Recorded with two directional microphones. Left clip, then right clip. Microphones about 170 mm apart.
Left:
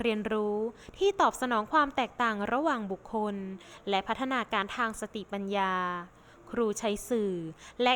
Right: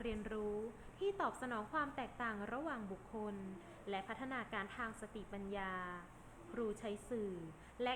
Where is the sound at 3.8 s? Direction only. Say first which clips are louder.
Left 15 dB; 80° left.